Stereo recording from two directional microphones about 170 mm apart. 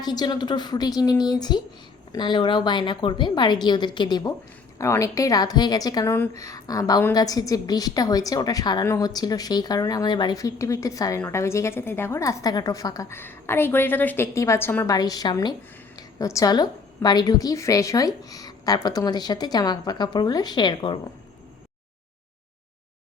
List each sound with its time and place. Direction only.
0.0 s a woman's voice: 25° left (ahead or behind)